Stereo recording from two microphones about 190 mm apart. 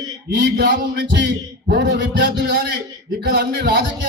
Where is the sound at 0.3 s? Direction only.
60° right (ahead or behind).